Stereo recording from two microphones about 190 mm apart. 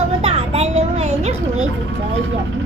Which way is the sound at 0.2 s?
30° right (ahead or behind).